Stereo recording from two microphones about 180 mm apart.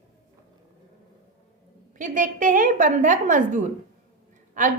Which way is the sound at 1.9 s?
45° right (ahead or behind).